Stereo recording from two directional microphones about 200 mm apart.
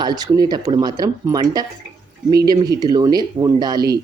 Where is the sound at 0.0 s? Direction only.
20° right (ahead or behind).